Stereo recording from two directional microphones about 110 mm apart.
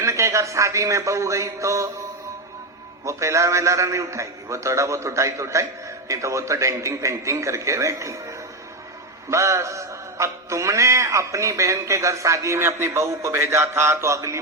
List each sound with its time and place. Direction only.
0.0 s speech: 25° right (ahead or behind)
3.0 s music: 25° right (ahead or behind)
9.3 s music: 25° right (ahead or behind)